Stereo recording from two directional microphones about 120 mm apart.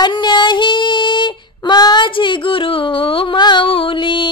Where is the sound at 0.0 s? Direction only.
40° left (ahead or behind).